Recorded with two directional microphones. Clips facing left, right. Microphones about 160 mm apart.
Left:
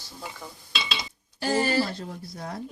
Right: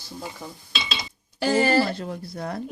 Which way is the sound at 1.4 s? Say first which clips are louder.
Right 4 dB; 75° right (ahead or behind).